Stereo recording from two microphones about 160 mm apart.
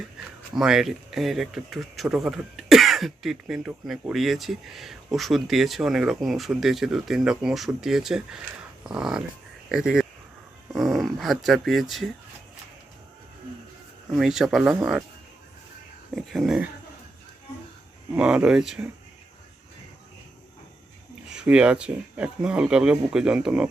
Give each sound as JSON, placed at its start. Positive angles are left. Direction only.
{"t": 0.5, "sound": "speech", "side_deg": -5}
{"t": 14.2, "sound": "speech", "side_deg": 0}
{"t": 16.1, "sound": "speech", "side_deg": 0}
{"t": 18.1, "sound": "speech", "side_deg": -10}
{"t": 21.3, "sound": "speech", "side_deg": -5}